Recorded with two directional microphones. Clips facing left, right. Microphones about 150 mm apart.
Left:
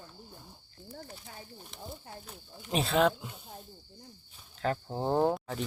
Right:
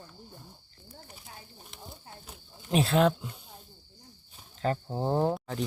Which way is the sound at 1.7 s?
Centre (ahead or behind).